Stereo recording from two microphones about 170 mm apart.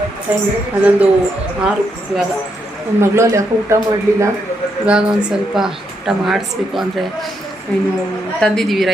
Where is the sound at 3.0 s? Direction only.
15° right (ahead or behind).